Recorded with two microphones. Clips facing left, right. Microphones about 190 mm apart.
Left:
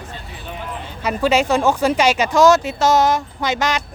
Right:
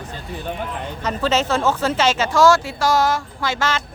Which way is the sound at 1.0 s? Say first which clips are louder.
Left 3 dB; 10° left (ahead or behind).